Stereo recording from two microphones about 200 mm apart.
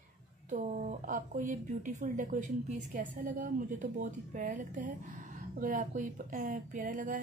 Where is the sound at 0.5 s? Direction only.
40° right (ahead or behind).